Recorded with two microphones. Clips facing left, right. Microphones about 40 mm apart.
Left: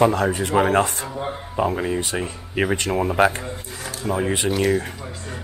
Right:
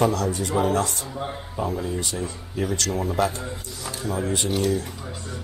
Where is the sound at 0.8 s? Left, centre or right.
Left.